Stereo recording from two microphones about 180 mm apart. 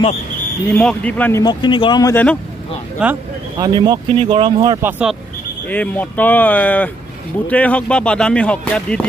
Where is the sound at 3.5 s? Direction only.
20° right (ahead or behind).